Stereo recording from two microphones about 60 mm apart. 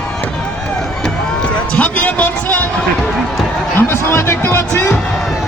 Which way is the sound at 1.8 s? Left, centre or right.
Left.